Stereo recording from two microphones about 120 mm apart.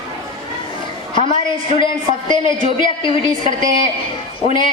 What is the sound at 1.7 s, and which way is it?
A woman's voice, 45° left (ahead or behind).